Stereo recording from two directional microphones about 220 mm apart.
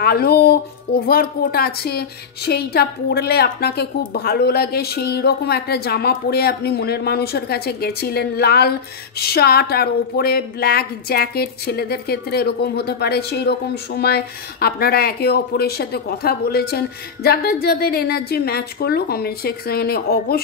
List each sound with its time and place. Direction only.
0.0 s speech: 45° left (ahead or behind)